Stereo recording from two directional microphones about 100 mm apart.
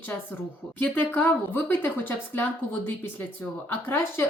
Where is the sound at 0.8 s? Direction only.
15° left (ahead or behind).